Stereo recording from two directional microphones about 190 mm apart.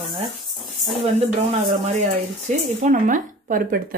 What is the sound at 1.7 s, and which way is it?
A woman's voice, 40° right (ahead or behind).